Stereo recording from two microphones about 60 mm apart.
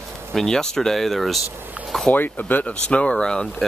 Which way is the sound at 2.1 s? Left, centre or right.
Left.